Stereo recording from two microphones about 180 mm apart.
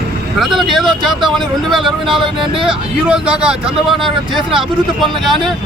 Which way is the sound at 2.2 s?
30° right (ahead or behind).